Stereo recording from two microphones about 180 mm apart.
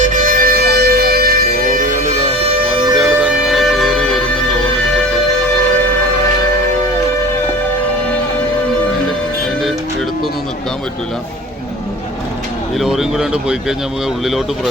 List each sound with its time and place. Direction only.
0.0 s music: 45° right (ahead or behind)
2.1 s music: 35° right (ahead or behind)
3.0 s music: 5° right (ahead or behind)
12.7 s a sound: centre (ahead or behind)
14.3 s speech: centre (ahead or behind)